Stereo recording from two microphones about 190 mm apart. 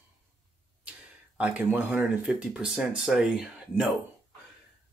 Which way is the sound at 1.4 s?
10° right (ahead or behind).